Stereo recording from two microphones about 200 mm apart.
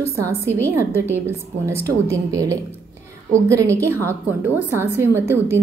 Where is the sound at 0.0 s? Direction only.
15° right (ahead or behind).